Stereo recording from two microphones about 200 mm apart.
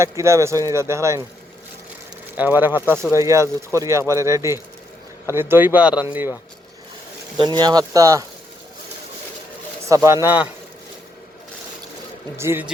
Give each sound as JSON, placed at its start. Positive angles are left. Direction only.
{"t": 0.0, "sound": "speech", "side_deg": -15}
{"t": 2.3, "sound": "speech", "side_deg": -10}
{"t": 7.3, "sound": "speech", "side_deg": -20}
{"t": 9.9, "sound": "speech", "side_deg": -15}
{"t": 12.4, "sound": "speech", "side_deg": -10}